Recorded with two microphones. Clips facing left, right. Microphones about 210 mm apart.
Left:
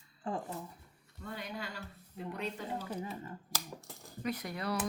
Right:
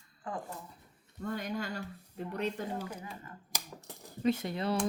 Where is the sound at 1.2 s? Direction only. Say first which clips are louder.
Right 6 dB; 45° right (ahead or behind).